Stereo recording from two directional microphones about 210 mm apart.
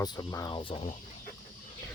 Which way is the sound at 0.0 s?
20° left (ahead or behind).